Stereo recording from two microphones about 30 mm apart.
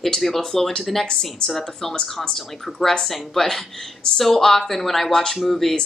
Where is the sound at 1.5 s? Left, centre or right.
Centre.